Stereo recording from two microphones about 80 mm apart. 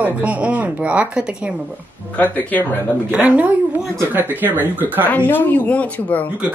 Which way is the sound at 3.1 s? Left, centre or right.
Centre.